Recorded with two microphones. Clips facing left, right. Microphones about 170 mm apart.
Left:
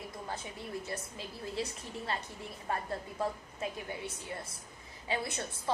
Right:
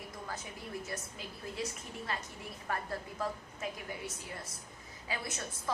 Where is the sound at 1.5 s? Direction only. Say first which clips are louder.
Left 2 dB; 30° left (ahead or behind).